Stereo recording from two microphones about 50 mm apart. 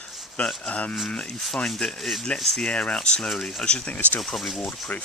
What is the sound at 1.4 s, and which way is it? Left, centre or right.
Speech, centre.